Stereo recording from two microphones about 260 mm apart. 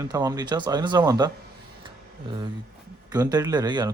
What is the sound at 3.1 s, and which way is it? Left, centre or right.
Speech, centre.